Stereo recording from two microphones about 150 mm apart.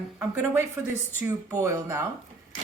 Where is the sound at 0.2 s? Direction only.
15° right (ahead or behind).